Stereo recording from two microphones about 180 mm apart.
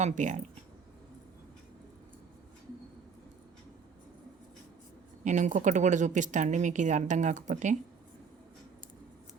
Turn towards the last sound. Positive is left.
turn(degrees=-40)  # may be behind; listen again after turning